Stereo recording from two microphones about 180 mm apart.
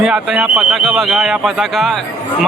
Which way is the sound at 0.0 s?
5° right (ahead or behind).